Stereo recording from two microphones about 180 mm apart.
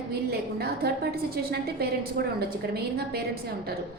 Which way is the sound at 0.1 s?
60° right (ahead or behind).